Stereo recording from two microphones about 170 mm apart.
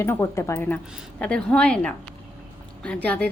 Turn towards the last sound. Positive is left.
turn(degrees=5)  # may be behind; listen again after turning